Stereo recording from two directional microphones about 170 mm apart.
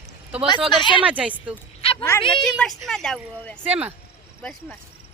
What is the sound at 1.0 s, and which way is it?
Speech, 5° right (ahead or behind).